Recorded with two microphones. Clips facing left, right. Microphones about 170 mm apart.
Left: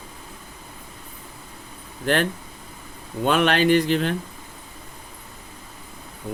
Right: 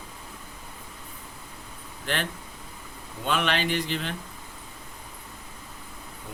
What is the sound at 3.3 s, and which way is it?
Speech, 50° left (ahead or behind).